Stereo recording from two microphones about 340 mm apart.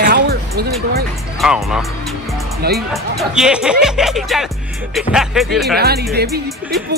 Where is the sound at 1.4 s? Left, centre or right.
Centre.